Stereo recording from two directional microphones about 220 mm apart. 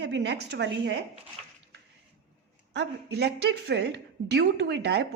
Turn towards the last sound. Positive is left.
turn(degrees=-50)  # may be behind; listen again after turning